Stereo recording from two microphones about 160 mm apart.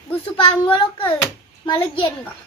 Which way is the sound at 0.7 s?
30° left (ahead or behind).